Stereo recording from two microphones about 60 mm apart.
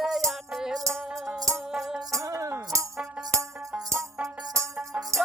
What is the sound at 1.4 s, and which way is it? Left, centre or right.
Music, right.